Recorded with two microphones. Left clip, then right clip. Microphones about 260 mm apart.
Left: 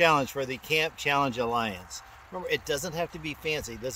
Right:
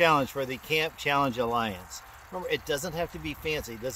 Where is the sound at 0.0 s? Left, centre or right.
Centre.